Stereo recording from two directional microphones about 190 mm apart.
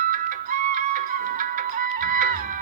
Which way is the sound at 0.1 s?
45° right (ahead or behind).